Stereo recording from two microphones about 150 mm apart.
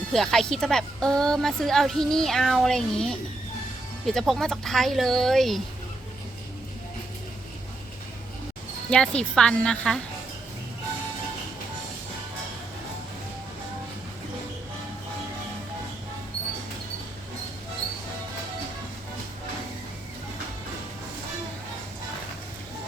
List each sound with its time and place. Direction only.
0.1 s a woman's voice: centre (ahead or behind)
8.9 s a woman's voice: 5° left (ahead or behind)